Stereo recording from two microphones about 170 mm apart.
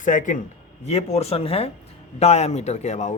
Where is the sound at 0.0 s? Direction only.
50° left (ahead or behind).